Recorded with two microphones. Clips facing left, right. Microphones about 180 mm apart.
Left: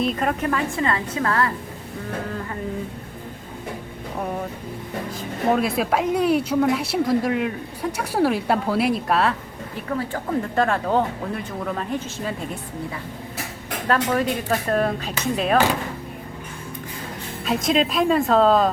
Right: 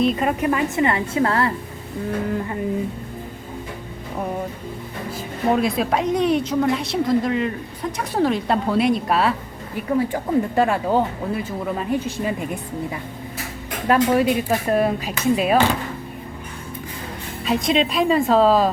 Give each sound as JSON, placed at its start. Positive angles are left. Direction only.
{"t": 0.0, "sound": "speech", "side_deg": 0}
{"t": 0.4, "sound": "a woman's voice", "side_deg": -15}
{"t": 5.5, "sound": "a woman's voice", "side_deg": 5}
{"t": 10.0, "sound": "speech", "side_deg": -15}
{"t": 13.8, "sound": "speech", "side_deg": -10}
{"t": 17.4, "sound": "speech", "side_deg": 0}